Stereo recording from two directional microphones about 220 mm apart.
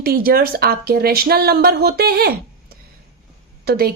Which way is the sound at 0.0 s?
45° right (ahead or behind).